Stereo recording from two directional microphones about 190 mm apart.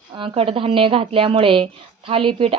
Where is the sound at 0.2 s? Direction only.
30° right (ahead or behind).